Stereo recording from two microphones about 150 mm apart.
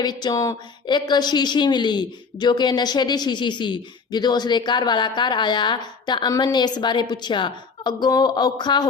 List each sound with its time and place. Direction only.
0.0 s a woman's voice: 30° left (ahead or behind)